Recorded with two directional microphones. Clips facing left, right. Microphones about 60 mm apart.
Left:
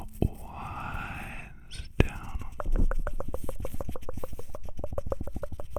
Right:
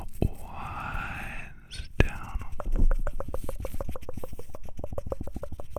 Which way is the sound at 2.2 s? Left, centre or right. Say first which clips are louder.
Right 2 dB; right.